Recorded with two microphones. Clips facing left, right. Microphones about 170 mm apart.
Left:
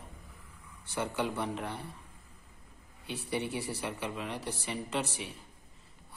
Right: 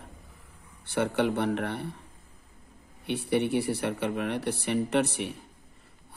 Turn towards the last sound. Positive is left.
turn(degrees=-60)  # may be behind; listen again after turning